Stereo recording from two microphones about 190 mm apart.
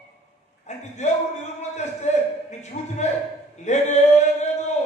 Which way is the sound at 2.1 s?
40° left (ahead or behind).